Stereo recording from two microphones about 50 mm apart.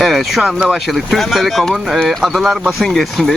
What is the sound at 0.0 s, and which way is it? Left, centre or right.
Speech, centre.